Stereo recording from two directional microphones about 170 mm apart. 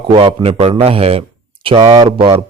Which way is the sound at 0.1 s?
30° right (ahead or behind).